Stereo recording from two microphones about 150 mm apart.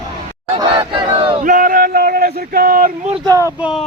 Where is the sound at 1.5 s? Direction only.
70° right (ahead or behind).